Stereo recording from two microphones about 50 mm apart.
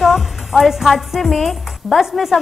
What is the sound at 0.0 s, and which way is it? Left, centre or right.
A woman's voice, centre.